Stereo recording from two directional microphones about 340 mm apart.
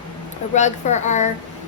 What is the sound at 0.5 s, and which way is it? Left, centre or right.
Speech, left.